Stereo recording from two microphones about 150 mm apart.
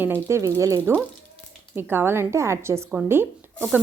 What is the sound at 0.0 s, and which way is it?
Speech, 15° right (ahead or behind).